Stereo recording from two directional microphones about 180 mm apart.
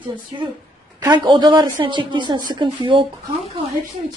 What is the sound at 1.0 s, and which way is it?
Speech, 25° right (ahead or behind).